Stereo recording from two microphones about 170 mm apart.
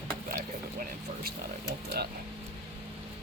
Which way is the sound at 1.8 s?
70° right (ahead or behind).